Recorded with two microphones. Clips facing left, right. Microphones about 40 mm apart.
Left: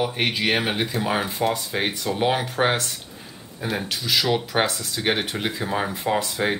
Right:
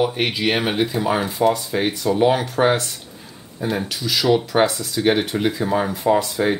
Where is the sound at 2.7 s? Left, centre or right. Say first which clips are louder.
Right 3 dB; centre.